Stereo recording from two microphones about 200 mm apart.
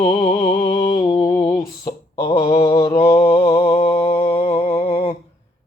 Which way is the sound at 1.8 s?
15° left (ahead or behind).